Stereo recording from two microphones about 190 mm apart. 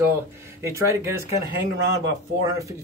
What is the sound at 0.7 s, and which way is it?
Speech, 15° right (ahead or behind).